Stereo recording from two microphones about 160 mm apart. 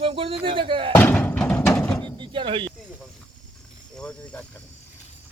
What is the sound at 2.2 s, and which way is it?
Speech, 30° right (ahead or behind).